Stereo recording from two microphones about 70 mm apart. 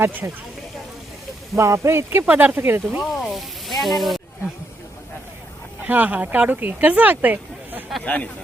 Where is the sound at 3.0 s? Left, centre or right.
Centre.